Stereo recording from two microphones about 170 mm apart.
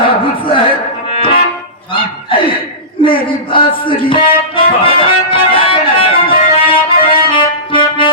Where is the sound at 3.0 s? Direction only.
30° left (ahead or behind).